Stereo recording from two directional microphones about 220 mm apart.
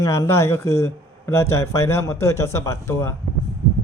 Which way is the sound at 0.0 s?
15° left (ahead or behind).